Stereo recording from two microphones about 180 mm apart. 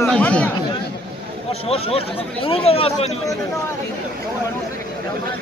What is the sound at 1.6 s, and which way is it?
Speech, 35° left (ahead or behind).